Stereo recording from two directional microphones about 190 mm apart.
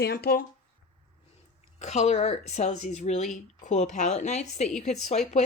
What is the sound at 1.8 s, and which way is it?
Speech, 35° left (ahead or behind).